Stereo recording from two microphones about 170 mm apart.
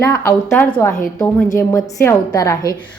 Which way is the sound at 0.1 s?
15° left (ahead or behind).